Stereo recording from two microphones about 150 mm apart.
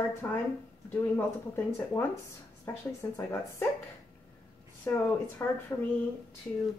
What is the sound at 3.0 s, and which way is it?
Speech, 20° left (ahead or behind).